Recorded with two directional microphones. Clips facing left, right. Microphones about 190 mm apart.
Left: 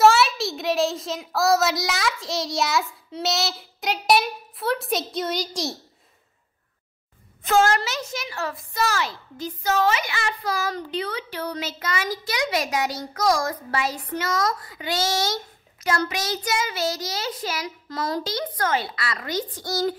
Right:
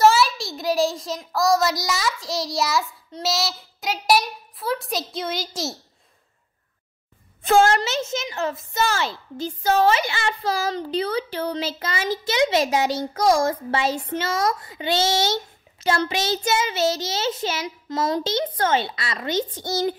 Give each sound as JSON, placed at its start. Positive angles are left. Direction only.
{"t": 0.0, "sound": "a child's voice", "side_deg": 0}
{"t": 7.4, "sound": "a woman's voice", "side_deg": -30}